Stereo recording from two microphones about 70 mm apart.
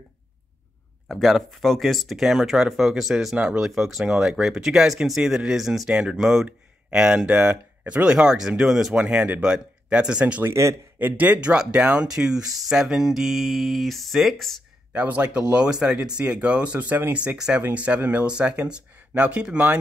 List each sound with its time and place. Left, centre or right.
1.0 s speech: centre
10.4 s a man's voice: right
11.0 s speech: right; by 14.6 s centre
14.9 s speech: right